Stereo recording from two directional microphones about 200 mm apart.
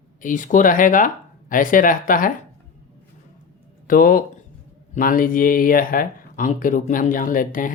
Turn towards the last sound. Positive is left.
turn(degrees=40)  # may be behind; listen again after turning